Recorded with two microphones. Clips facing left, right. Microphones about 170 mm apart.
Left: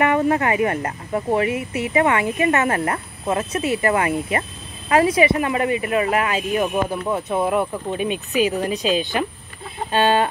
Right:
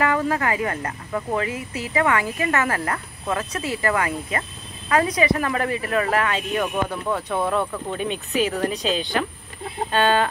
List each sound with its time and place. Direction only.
0.0 s a woman's voice: 25° left (ahead or behind)
6.2 s a woman's voice: 25° left (ahead or behind)